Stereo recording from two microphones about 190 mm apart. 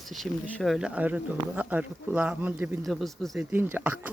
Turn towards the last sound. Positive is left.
turn(degrees=-10)  # may be behind; listen again after turning